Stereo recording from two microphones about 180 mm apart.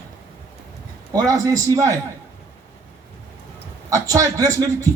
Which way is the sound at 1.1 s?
20° right (ahead or behind).